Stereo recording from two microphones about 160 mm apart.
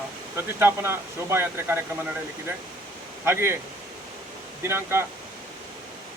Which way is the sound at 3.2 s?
15° right (ahead or behind).